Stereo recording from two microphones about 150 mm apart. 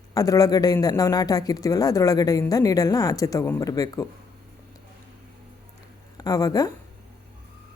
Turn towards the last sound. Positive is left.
turn(degrees=25)  # may be behind; listen again after turning